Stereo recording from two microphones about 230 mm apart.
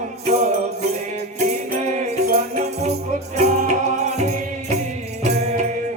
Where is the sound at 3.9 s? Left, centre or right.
Right.